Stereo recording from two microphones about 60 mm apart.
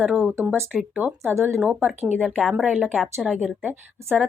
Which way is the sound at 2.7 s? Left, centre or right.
Right.